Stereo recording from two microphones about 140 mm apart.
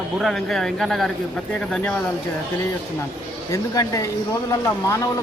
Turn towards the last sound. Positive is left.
turn(degrees=20)  # may be behind; listen again after turning